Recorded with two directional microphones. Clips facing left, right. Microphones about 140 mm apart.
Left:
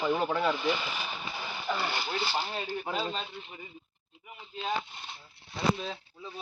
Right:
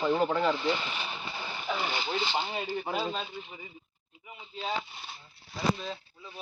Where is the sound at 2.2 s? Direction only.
5° left (ahead or behind).